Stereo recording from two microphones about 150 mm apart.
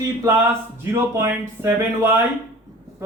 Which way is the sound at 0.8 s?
15° right (ahead or behind).